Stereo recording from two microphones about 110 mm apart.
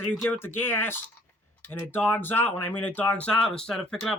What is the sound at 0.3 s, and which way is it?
Speech, 20° left (ahead or behind).